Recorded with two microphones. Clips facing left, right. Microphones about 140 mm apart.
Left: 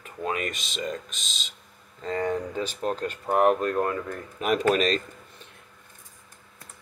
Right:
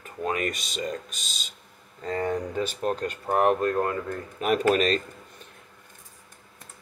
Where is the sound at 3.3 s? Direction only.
5° left (ahead or behind).